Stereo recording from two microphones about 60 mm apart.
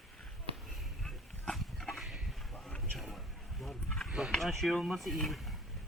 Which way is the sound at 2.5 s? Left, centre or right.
Centre.